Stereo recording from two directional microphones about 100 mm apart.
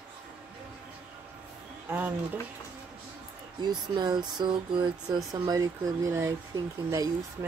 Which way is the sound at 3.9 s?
50° right (ahead or behind).